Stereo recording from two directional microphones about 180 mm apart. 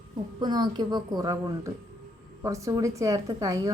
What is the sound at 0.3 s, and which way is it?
A woman's voice, 25° right (ahead or behind).